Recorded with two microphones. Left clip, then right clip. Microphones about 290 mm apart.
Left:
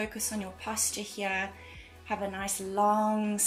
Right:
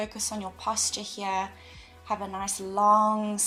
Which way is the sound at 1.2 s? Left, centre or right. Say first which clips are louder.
Right 2 dB; centre.